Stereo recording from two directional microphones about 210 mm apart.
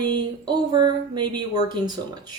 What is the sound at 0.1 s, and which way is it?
Speech, 20° right (ahead or behind).